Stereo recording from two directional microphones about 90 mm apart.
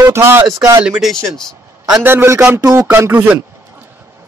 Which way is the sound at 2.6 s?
40° right (ahead or behind).